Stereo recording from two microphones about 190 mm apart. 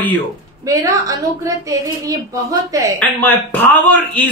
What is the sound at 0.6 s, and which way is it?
A woman's voice, 20° right (ahead or behind).